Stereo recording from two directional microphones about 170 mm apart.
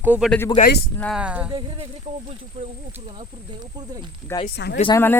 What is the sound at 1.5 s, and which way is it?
A man's voice, 25° right (ahead or behind).